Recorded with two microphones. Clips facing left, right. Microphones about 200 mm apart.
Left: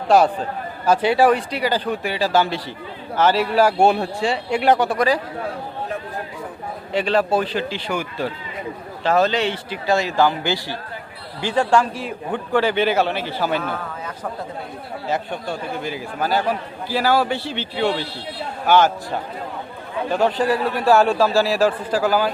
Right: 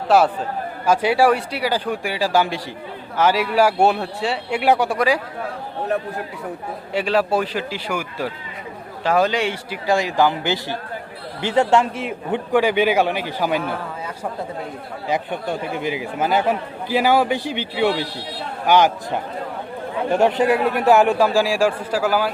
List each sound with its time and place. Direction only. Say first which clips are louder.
0.9 s a man's voice: left 1 dB; 10° right (ahead or behind)
6.9 s a man's voice: even; 10° right (ahead or behind)
15.0 s a man's voice: right 2 dB; 15° right (ahead or behind)